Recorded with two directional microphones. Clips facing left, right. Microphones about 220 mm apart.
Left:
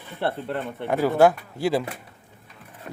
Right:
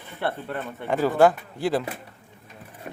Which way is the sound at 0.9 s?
15° left (ahead or behind).